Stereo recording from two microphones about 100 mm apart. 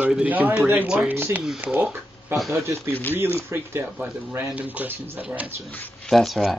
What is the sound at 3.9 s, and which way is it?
Speech, 10° right (ahead or behind).